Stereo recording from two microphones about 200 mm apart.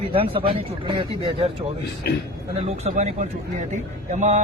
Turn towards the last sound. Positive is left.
turn(degrees=-35)  # may be behind; listen again after turning